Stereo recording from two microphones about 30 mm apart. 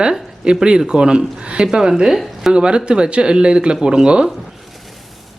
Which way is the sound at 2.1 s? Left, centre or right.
Centre.